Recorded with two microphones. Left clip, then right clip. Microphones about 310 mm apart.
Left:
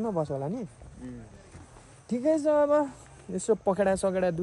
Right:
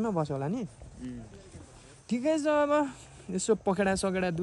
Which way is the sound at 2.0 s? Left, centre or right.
Centre.